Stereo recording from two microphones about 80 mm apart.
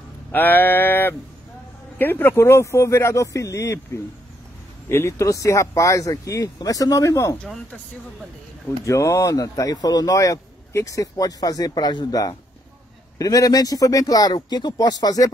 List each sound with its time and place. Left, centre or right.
0.3 s a sound: left
2.0 s speech: left
8.8 s speech: left
13.2 s speech: left